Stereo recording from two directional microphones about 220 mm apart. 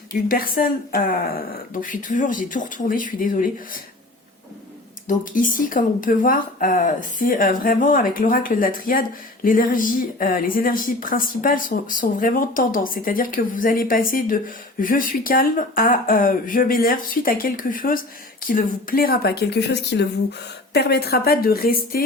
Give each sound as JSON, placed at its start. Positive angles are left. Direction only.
{"t": 0.1, "sound": "speech", "side_deg": 40}
{"t": 5.0, "sound": "speech", "side_deg": 35}